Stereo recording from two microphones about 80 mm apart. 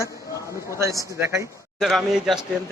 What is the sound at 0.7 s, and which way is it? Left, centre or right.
Speech, right.